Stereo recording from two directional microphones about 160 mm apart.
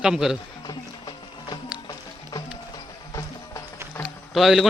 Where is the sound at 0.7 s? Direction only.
25° left (ahead or behind).